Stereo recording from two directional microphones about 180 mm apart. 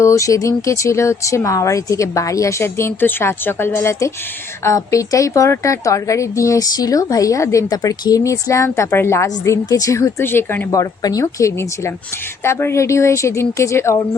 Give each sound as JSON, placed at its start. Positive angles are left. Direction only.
{"t": 0.0, "sound": "a woman's voice", "side_deg": 15}